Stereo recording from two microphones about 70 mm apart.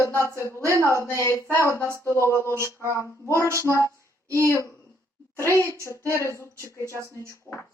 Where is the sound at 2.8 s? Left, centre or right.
Right.